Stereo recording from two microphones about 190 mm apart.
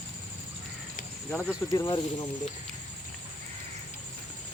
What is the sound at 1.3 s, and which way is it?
Speech, 10° left (ahead or behind).